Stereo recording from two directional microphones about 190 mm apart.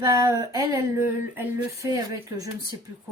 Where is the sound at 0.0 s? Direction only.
20° right (ahead or behind).